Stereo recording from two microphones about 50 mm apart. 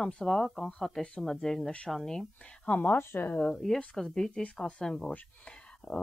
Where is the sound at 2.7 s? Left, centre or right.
Left.